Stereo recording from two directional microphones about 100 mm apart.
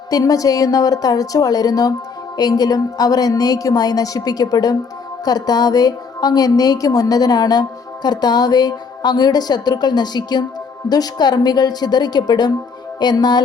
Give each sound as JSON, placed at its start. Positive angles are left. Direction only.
{"t": 0.1, "sound": "a woman's voice", "side_deg": 35}